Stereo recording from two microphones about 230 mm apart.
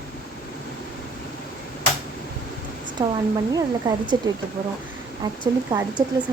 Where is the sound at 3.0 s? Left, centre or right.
Centre.